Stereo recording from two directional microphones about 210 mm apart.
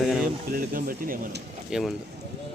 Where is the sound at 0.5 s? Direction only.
40° right (ahead or behind).